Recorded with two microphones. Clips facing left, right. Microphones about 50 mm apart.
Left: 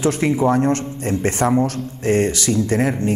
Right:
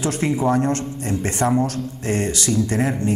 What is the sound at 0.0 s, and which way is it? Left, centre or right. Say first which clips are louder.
A man's voice: left 3 dB; left.